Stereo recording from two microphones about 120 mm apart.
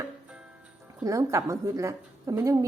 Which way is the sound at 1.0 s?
25° right (ahead or behind).